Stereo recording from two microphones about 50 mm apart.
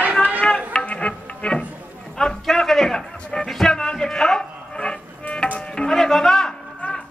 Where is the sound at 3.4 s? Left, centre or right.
Centre.